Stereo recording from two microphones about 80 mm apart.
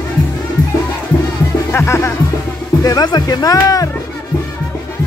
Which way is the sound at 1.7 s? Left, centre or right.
Left.